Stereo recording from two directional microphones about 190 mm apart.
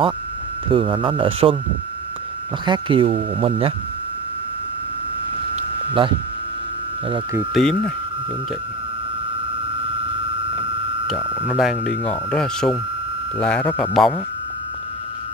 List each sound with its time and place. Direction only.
0.7 s speech: 25° right (ahead or behind)
2.6 s speech: 25° right (ahead or behind)
6.0 s speech: 25° right (ahead or behind)
7.5 s speech: 5° left (ahead or behind)
11.3 s speech: centre (ahead or behind)